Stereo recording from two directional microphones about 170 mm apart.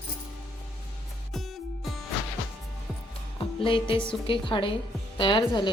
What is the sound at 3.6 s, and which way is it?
A woman's voice, 30° left (ahead or behind).